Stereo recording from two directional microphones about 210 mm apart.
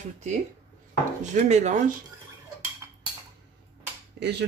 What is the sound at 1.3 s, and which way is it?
Speech, 35° right (ahead or behind).